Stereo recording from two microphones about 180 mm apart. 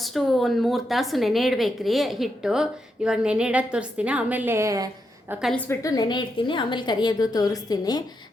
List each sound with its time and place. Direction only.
0.0 s a woman's voice: centre (ahead or behind); by 4.9 s 15° right (ahead or behind)
5.3 s a woman's voice: centre (ahead or behind)
5.5 s a woman's voice: 15° left (ahead or behind)